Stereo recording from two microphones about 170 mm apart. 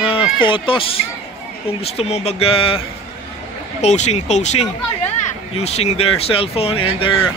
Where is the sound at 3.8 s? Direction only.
40° left (ahead or behind).